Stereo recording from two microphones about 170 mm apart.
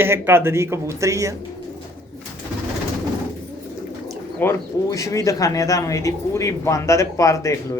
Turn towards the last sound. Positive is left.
turn(degrees=20)  # may be behind; listen again after turning